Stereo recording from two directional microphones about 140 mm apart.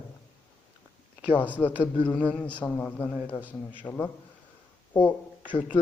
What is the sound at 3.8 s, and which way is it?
Speech, 15° left (ahead or behind).